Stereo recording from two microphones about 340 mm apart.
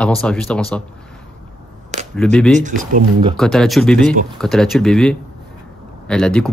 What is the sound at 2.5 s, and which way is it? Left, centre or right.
Speech, right.